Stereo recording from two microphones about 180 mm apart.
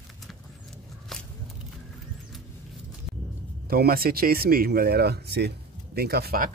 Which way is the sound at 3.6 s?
55° right (ahead or behind).